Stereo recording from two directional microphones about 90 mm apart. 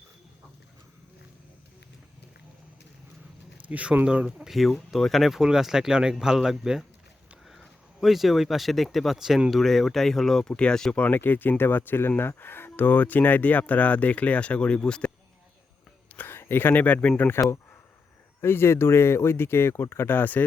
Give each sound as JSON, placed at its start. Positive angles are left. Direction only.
{"t": 3.7, "sound": "speech", "side_deg": -15}
{"t": 16.1, "sound": "speech", "side_deg": 25}
{"t": 18.4, "sound": "speech", "side_deg": 25}